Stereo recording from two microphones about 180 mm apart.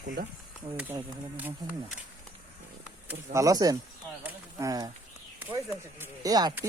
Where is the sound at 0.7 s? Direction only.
10° right (ahead or behind).